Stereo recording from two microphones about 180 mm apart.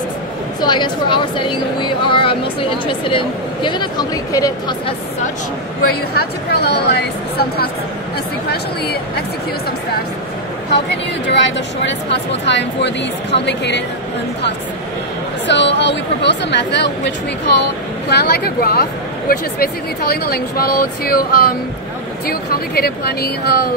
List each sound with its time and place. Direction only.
0.6 s speech: 25° left (ahead or behind)
5.8 s speech: 60° left (ahead or behind)
10.9 s speech: 75° left (ahead or behind)
15.4 s speech: 75° left (ahead or behind)
18.1 s speech: 65° left (ahead or behind)